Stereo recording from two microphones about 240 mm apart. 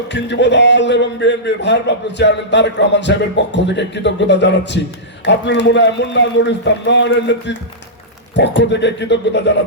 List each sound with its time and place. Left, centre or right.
0.1 s a man's voice: left